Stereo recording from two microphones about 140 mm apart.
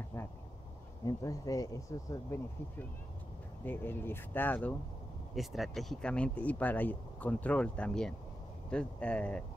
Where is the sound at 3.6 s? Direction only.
15° left (ahead or behind).